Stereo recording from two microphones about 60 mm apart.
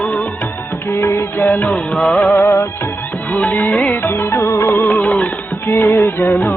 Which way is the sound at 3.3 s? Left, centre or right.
Left.